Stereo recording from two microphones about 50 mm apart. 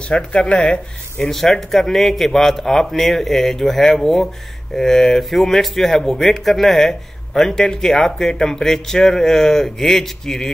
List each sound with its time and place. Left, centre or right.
0.1 s speech: centre
1.2 s speech: centre